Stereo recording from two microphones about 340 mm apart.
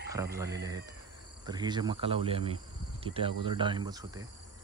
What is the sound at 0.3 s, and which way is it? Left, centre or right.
Speech, centre.